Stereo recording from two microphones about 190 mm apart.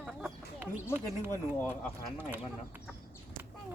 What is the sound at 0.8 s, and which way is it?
Speech, 10° left (ahead or behind).